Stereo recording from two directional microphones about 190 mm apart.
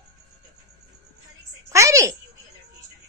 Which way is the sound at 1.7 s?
15° right (ahead or behind).